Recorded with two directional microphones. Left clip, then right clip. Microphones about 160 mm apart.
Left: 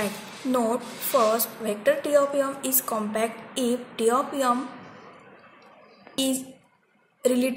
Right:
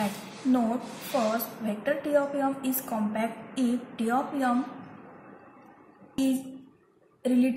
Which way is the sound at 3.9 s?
65° left (ahead or behind).